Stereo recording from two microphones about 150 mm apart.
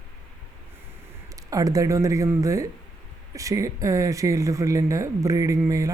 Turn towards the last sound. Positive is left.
turn(degrees=-20)  # may be behind; listen again after turning